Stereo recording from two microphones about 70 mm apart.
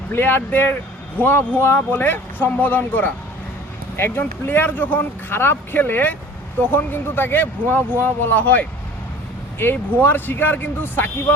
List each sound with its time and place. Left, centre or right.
0.1 s speech: left
9.7 s speech: left